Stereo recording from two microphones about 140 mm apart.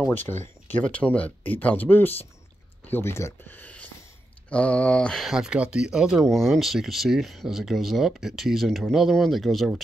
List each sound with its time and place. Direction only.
0.1 s speech: 15° left (ahead or behind)